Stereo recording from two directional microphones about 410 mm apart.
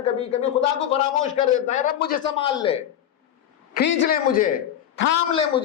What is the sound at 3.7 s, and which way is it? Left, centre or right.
Speech, left.